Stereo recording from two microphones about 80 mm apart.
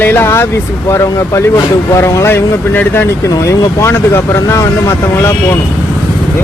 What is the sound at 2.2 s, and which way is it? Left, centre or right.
Speech, left.